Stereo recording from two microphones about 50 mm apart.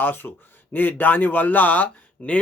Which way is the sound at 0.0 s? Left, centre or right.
Left.